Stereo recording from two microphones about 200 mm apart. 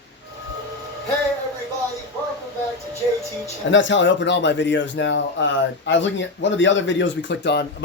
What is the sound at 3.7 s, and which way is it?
A man's voice, 65° left (ahead or behind).